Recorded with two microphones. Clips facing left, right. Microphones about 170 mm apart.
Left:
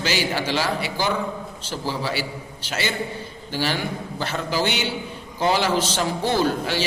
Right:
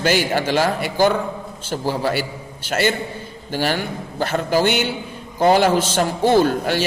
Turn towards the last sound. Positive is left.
turn(degrees=-50)  # may be behind; listen again after turning